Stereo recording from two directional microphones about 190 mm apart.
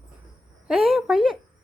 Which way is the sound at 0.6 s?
Centre (ahead or behind).